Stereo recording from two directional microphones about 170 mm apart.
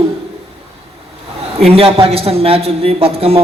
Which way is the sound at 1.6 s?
35° right (ahead or behind).